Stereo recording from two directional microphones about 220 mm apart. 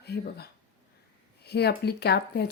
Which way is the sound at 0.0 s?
45° left (ahead or behind).